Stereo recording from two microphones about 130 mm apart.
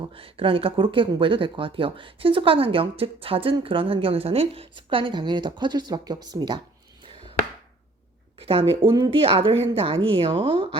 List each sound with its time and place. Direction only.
0.1 s speech: 45° right (ahead or behind)
8.4 s speech: 45° right (ahead or behind)